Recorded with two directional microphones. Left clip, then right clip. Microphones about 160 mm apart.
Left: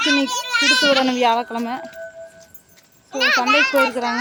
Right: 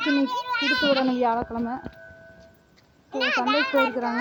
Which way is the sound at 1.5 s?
35° left (ahead or behind).